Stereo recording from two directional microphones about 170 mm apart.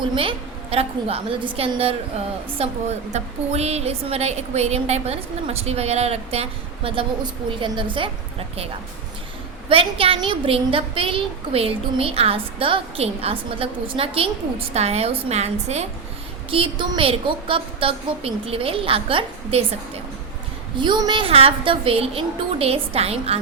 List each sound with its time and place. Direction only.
0.2 s a woman's voice: 35° right (ahead or behind)
9.6 s a woman's voice: 30° right (ahead or behind)
16.5 s a woman's voice: 30° right (ahead or behind)
20.7 s a woman's voice: 25° right (ahead or behind)